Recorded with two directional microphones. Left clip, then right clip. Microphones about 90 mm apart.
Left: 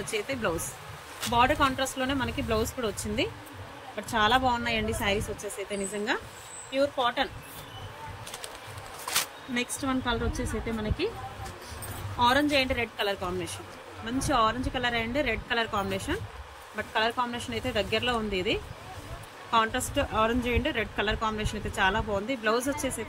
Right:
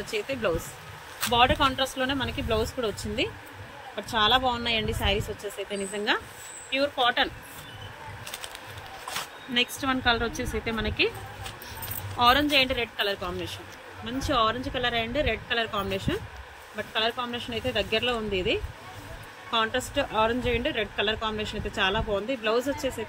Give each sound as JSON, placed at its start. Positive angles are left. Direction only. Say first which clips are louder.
{"t": 0.0, "sound": "speech", "louder": "right 1 dB", "side_deg": 30}
{"t": 1.3, "sound": "speech", "louder": "right 2 dB", "side_deg": 15}
{"t": 3.9, "sound": "speech", "louder": "right 1 dB", "side_deg": 20}
{"t": 9.5, "sound": "speech", "louder": "right 5 dB", "side_deg": 15}
{"t": 9.8, "sound": "a woman's voice", "louder": "right 5 dB", "side_deg": 5}
{"t": 12.2, "sound": "speech", "louder": "right 3 dB", "side_deg": 15}